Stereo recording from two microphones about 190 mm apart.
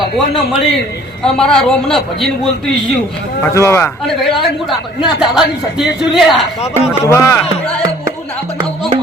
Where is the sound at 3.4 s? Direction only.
15° left (ahead or behind).